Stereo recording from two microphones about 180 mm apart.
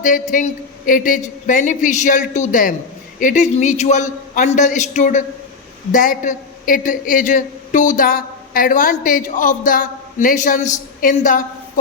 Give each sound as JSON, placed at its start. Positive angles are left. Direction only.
{"t": 0.0, "sound": "a man's voice", "side_deg": 45}